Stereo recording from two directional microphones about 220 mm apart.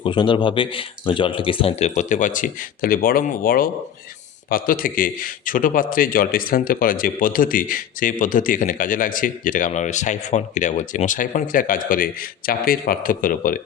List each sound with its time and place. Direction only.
0.0 s speech: 20° left (ahead or behind); by 13.6 s 40° left (ahead or behind)